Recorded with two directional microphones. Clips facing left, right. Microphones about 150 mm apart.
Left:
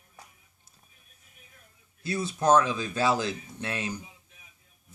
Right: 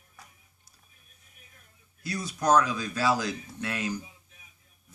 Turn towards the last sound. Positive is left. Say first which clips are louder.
# right 1 dB
turn(degrees=25)  # may be behind; listen again after turning